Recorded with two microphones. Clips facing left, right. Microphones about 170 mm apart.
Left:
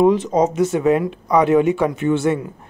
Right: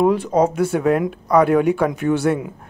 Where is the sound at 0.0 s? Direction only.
Centre (ahead or behind).